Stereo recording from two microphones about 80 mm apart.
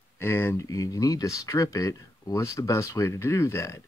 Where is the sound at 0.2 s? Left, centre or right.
Left.